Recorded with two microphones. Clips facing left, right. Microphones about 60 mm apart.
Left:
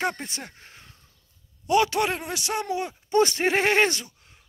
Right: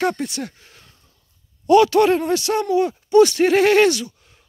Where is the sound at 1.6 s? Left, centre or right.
Centre.